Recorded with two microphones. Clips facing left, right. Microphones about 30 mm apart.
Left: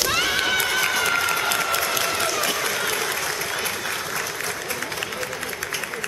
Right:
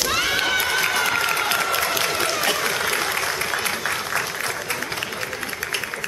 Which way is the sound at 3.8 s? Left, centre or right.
Centre.